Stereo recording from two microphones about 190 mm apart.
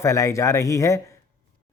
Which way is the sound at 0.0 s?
15° left (ahead or behind).